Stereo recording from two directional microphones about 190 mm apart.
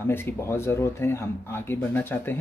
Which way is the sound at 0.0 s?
10° left (ahead or behind).